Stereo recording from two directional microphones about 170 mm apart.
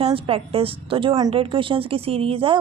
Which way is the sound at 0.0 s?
35° right (ahead or behind).